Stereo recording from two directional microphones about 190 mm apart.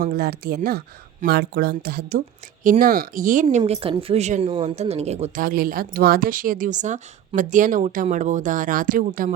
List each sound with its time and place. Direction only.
0.0 s speech: 55° right (ahead or behind)
3.7 s speech: 30° right (ahead or behind); by 9.3 s 45° right (ahead or behind)